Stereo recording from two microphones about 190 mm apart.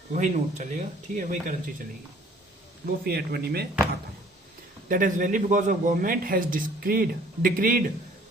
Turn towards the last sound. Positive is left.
turn(degrees=-50)  # may be behind; listen again after turning